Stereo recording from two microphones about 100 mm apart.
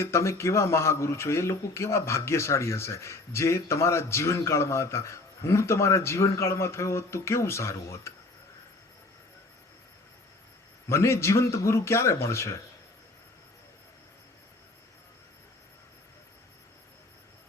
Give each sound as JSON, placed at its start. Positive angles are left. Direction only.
{"t": 0.0, "sound": "speech", "side_deg": 30}
{"t": 10.8, "sound": "speech", "side_deg": 30}